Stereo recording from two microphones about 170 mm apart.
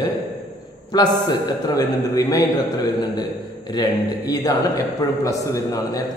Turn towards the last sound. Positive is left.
turn(degrees=20)  # may be behind; listen again after turning